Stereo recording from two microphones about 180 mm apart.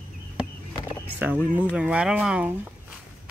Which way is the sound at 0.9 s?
10° right (ahead or behind).